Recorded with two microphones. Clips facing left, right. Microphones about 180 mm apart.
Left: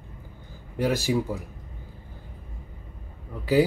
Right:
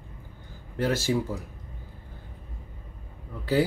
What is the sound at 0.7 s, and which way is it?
Speech, 15° left (ahead or behind).